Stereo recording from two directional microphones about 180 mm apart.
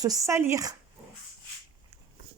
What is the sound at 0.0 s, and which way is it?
Speech, 20° right (ahead or behind).